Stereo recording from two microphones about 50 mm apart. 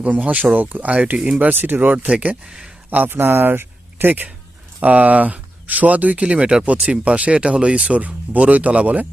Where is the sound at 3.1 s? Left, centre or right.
Right.